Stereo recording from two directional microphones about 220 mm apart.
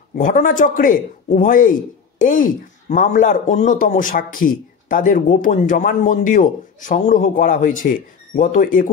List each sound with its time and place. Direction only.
0.2 s a man's voice: 35° left (ahead or behind)